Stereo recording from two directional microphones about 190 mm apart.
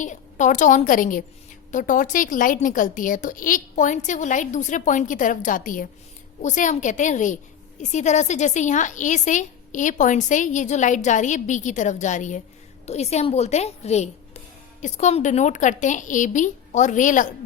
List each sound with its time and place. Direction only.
0.0 s a woman's voice: 40° left (ahead or behind)